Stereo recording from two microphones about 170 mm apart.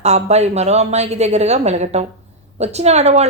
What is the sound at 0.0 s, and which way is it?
A woman's voice, 40° right (ahead or behind).